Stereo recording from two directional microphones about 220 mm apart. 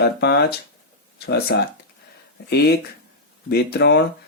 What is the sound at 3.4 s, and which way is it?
Speech, 45° left (ahead or behind).